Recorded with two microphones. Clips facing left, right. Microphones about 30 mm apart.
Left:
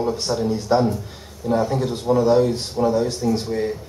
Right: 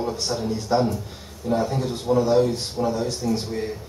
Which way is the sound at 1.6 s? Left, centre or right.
Centre.